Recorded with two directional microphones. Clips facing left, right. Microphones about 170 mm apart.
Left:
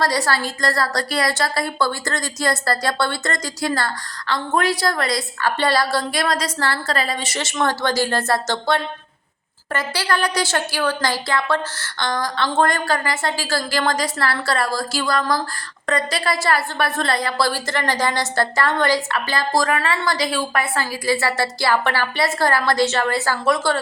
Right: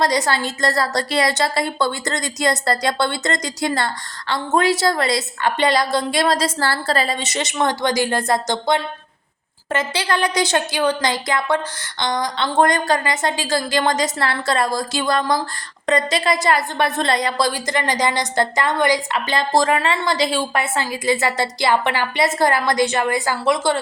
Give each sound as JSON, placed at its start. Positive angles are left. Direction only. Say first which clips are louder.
{"t": 0.0, "sound": "a woman's voice", "louder": "right 2 dB", "side_deg": -20}